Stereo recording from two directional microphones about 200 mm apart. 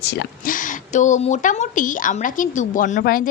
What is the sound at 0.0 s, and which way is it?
Speech, 55° left (ahead or behind).